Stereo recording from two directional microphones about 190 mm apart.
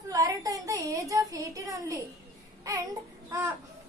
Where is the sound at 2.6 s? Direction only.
15° right (ahead or behind).